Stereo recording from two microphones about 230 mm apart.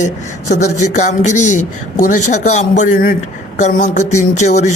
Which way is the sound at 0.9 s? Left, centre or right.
Left.